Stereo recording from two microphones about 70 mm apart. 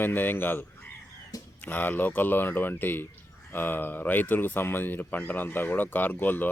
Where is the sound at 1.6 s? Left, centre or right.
Left.